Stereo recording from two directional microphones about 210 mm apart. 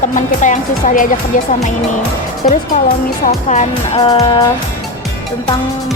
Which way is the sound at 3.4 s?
30° left (ahead or behind).